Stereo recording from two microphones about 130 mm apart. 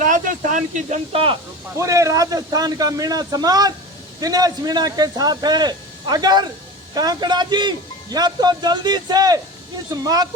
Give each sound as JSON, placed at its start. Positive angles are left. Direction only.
{"t": 0.0, "sound": "speech", "side_deg": -85}
{"t": 1.1, "sound": "speech", "side_deg": -45}
{"t": 1.7, "sound": "a man's voice", "side_deg": -25}